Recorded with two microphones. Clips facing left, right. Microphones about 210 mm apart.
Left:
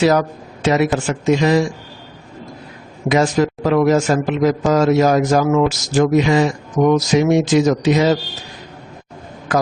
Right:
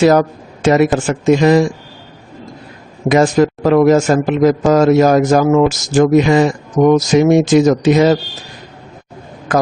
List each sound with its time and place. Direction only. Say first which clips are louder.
0.0 s a man's voice: right 4 dB; 50° right (ahead or behind)
3.1 s a man's voice: right 4 dB; 50° right (ahead or behind)